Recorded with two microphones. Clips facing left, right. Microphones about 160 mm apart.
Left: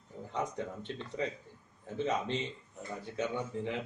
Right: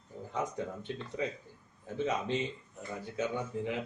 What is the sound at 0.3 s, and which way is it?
Speech, 5° right (ahead or behind).